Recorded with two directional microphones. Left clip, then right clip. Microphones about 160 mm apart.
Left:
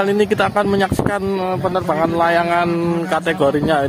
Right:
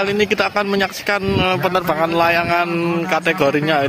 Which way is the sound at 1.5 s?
Centre (ahead or behind).